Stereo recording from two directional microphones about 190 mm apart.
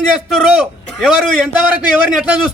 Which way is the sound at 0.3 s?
Centre (ahead or behind).